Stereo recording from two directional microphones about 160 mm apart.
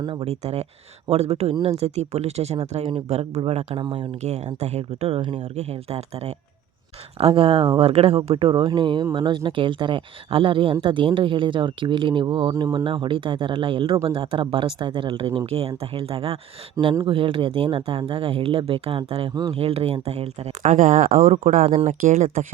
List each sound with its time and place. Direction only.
0.0 s speech: 30° right (ahead or behind)
3.7 s speech: 30° right (ahead or behind)
4.2 s speech: 45° right (ahead or behind)
16.8 s speech: 20° right (ahead or behind)
17.1 s speech: 35° right (ahead or behind)
19.3 s speech: 25° right (ahead or behind)
19.5 s speech: 40° right (ahead or behind); by 21.7 s 55° right (ahead or behind)
21.7 s speech: 35° right (ahead or behind)